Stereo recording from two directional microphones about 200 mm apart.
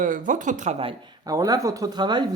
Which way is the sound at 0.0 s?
40° right (ahead or behind).